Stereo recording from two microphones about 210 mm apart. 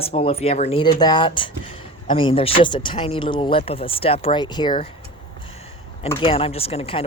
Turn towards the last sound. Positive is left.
turn(degrees=30)  # may be behind; listen again after turning